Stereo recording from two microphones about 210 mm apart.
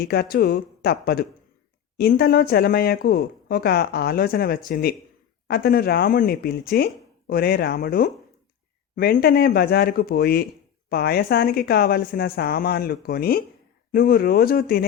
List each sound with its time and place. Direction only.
0.0 s speech: 50° left (ahead or behind)